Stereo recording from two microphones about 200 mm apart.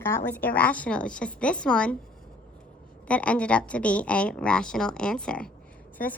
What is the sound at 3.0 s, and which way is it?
A woman's voice, 5° left (ahead or behind).